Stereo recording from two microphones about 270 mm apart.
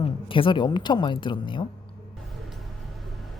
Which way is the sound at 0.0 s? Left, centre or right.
Centre.